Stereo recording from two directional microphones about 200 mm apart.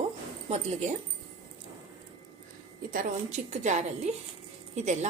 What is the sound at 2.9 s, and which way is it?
A woman's voice, 40° right (ahead or behind).